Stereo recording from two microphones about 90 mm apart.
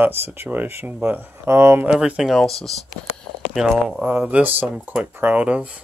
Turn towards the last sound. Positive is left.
turn(degrees=-15)  # may be behind; listen again after turning